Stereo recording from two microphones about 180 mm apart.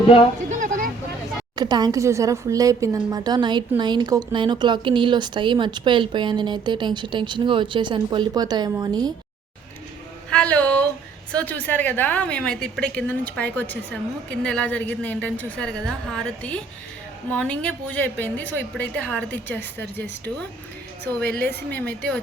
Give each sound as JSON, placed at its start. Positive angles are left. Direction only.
{"t": 0.5, "sound": "a sound", "side_deg": -45}
{"t": 1.5, "sound": "a woman's voice", "side_deg": -20}
{"t": 10.2, "sound": "a woman's voice", "side_deg": 5}
{"t": 19.8, "sound": "speech", "side_deg": -65}
{"t": 21.3, "sound": "a woman's voice", "side_deg": 10}